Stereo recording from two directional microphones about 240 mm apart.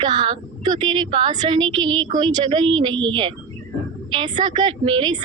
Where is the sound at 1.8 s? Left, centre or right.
Right.